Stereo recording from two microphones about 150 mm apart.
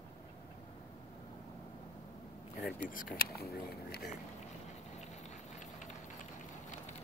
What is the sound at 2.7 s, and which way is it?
Speech, 65° left (ahead or behind).